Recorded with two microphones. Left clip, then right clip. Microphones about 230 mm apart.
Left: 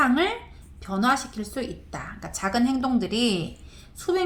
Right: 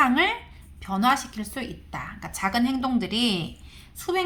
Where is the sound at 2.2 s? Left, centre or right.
Right.